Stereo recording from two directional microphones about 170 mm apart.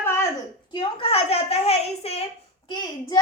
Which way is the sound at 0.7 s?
30° left (ahead or behind).